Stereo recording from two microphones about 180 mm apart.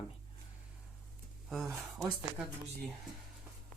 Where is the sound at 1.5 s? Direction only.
Centre (ahead or behind).